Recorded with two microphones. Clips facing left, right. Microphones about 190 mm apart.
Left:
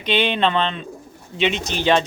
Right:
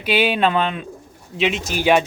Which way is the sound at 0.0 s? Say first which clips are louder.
Right 2 dB; 5° right (ahead or behind).